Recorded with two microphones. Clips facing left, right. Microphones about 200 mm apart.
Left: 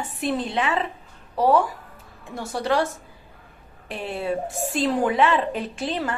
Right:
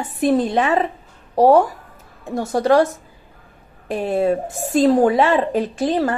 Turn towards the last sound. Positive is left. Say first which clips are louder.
# right 8 dB
turn(degrees=-40)  # may be behind; listen again after turning